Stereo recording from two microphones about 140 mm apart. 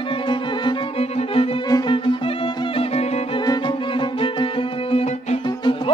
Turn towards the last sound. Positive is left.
turn(degrees=40)  # may be behind; listen again after turning